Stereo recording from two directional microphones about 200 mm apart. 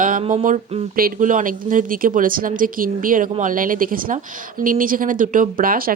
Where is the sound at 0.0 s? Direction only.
40° right (ahead or behind).